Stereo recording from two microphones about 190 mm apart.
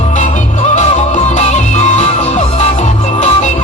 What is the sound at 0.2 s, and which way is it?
Music, 40° left (ahead or behind).